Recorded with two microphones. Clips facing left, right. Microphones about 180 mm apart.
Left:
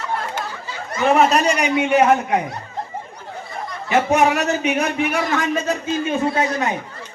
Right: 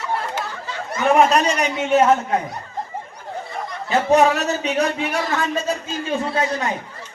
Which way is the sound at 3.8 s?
15° left (ahead or behind).